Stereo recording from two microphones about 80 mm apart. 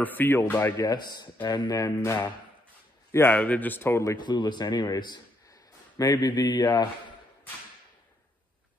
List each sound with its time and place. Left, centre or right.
0.0 s speech: left
0.9 s speech: left
3.1 s speech: left
4.2 s a man's voice: left
5.9 s speech: left